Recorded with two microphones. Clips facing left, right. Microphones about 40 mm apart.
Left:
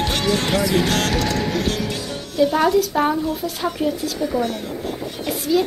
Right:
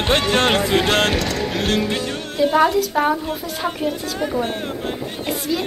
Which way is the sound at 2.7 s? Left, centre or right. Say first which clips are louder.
Even; centre.